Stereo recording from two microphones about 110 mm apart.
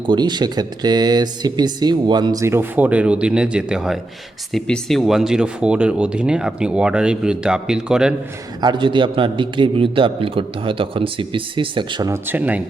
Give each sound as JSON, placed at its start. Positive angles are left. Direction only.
{"t": 0.1, "sound": "speech", "side_deg": -40}
{"t": 2.4, "sound": "speech", "side_deg": -20}
{"t": 4.5, "sound": "speech", "side_deg": 5}
{"t": 8.6, "sound": "a man's voice", "side_deg": -50}
{"t": 12.0, "sound": "speech", "side_deg": -20}